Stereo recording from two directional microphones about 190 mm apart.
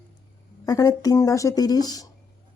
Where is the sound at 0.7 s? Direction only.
20° left (ahead or behind).